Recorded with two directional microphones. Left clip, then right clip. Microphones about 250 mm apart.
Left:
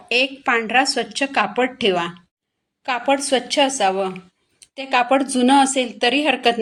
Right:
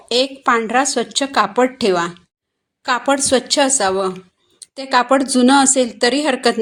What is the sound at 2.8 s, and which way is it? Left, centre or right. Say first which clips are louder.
A woman's voice: right 3 dB; right.